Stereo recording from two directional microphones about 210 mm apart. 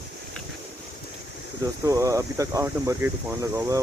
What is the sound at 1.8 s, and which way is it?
Speech, 15° right (ahead or behind).